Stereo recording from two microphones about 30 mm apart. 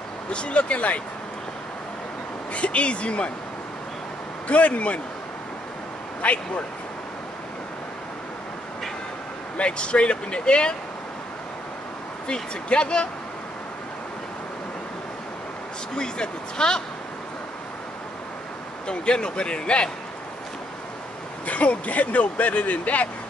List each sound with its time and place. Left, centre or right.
0.3 s speech: left
2.5 s speech: left
4.5 s speech: left
6.2 s speech: left
9.7 s speech: left
12.3 s speech: left
15.9 s speech: left
18.9 s speech: left
21.5 s speech: left